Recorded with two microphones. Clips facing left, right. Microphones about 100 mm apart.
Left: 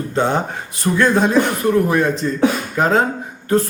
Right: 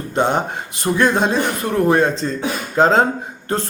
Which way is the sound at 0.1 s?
20° right (ahead or behind).